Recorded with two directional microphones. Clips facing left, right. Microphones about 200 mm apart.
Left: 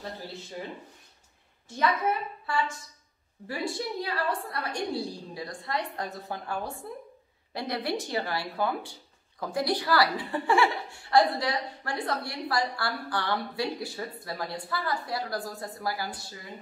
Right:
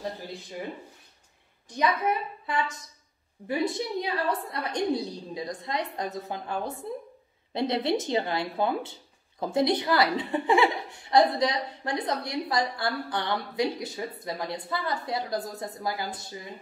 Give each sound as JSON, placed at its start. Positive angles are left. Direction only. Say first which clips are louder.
{"t": 1.7, "sound": "a woman's voice", "louder": "right 1 dB", "side_deg": -15}